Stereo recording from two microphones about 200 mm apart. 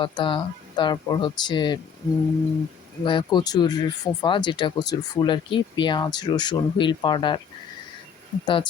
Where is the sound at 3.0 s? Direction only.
25° left (ahead or behind).